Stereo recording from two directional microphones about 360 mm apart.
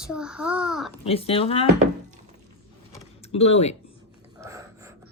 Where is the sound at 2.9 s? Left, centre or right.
Centre.